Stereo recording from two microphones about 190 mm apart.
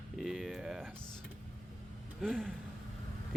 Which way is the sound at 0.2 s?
Centre (ahead or behind).